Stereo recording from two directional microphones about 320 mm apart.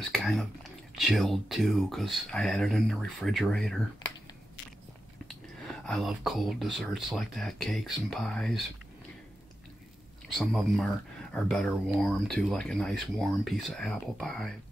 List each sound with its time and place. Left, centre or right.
0.1 s speech: centre
5.3 s speech: centre
10.3 s speech: centre